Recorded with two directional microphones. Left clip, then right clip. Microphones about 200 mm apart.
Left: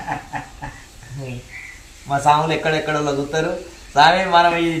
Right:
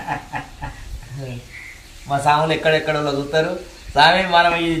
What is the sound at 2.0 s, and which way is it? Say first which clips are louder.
A man's voice: left 1 dB; 15° right (ahead or behind).